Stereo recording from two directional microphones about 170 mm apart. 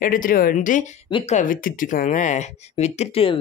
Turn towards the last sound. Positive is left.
turn(degrees=35)  # may be behind; listen again after turning